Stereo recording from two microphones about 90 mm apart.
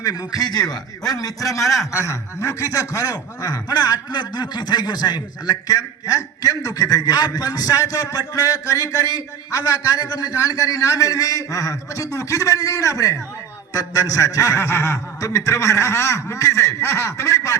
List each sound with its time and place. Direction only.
0.0 s a man's voice: 45° left (ahead or behind)